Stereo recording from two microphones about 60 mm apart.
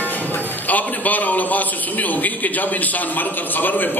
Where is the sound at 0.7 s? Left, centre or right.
Left.